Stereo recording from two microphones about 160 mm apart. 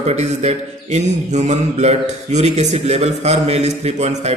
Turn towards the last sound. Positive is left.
turn(degrees=-45)  # may be behind; listen again after turning